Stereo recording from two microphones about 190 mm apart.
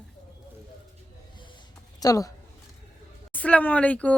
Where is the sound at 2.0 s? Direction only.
20° left (ahead or behind).